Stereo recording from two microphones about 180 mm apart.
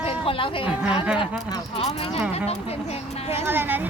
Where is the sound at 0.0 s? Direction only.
30° left (ahead or behind).